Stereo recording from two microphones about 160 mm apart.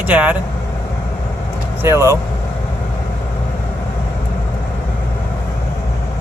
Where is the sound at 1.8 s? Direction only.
15° right (ahead or behind).